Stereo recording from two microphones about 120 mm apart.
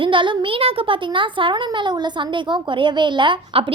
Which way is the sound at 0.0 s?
45° right (ahead or behind).